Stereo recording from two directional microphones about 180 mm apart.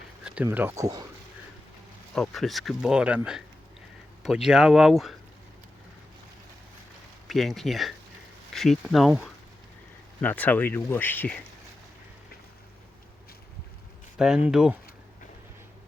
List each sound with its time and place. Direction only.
0.4 s speech: 15° right (ahead or behind)
2.1 s speech: centre (ahead or behind)
4.4 s speech: centre (ahead or behind)
7.3 s speech: centre (ahead or behind)
10.2 s speech: 10° left (ahead or behind)
14.2 s speech: 5° right (ahead or behind)